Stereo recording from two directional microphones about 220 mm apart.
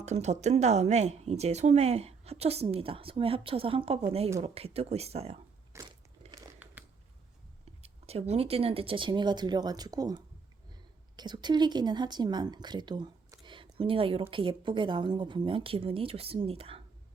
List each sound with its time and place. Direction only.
0.0 s speech: 30° right (ahead or behind)
5.7 s biting: 15° right (ahead or behind)
7.6 s speech: 30° right (ahead or behind)